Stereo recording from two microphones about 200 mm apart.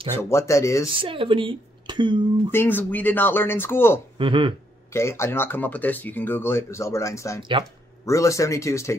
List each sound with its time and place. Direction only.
0.1 s speech: 15° left (ahead or behind)
1.0 s speech: 25° right (ahead or behind)
2.5 s speech: 10° left (ahead or behind)
4.2 s speech: 25° right (ahead or behind)
4.9 s speech: 15° left (ahead or behind)